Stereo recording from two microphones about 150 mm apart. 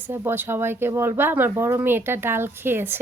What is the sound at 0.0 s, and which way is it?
A woman's voice, 15° right (ahead or behind).